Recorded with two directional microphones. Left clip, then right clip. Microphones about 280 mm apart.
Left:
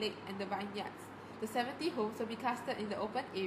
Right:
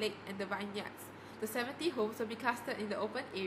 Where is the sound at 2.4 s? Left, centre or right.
Right.